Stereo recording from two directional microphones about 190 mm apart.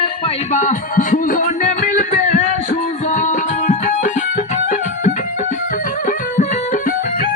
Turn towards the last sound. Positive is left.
turn(degrees=45)  # may be behind; listen again after turning